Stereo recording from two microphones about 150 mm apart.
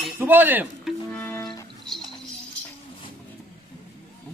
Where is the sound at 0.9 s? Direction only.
5° left (ahead or behind).